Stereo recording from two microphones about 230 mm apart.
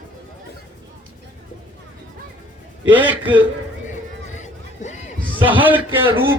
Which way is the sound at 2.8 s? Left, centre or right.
Centre.